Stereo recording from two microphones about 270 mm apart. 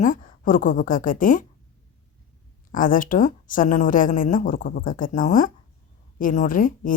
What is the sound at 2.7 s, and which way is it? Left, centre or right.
A woman's voice, left.